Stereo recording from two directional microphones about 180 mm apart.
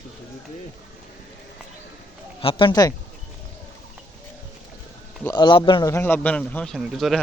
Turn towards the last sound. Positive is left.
turn(degrees=0)  # may be behind; listen again after turning